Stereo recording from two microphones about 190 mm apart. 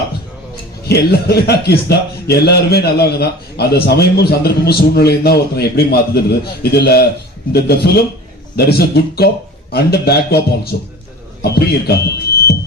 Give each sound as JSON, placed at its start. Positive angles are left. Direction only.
{"t": 0.9, "sound": "a man's voice", "side_deg": 60}